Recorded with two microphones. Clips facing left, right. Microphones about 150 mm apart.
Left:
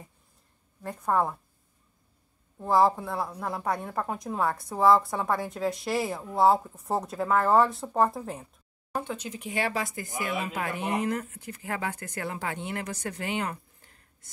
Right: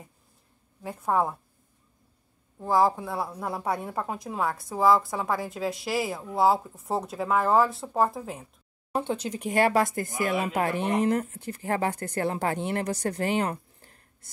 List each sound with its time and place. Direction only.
0.8 s speech: 5° right (ahead or behind)
2.6 s speech: centre (ahead or behind)
8.9 s speech: 30° right (ahead or behind)